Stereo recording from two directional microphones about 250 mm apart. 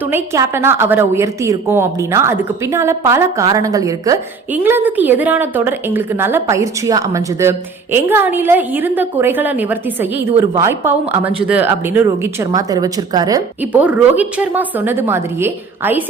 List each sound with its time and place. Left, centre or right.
0.1 s a woman's voice: centre